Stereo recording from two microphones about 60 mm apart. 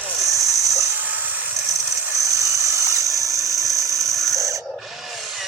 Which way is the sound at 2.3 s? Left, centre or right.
Right.